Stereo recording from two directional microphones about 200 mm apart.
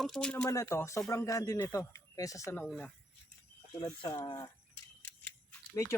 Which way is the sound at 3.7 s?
20° left (ahead or behind).